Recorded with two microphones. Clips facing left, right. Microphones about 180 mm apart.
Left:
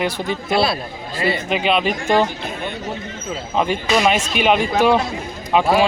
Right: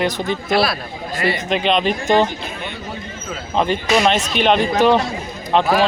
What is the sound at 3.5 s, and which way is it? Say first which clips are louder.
Speech: right 1 dB; 5° left (ahead or behind).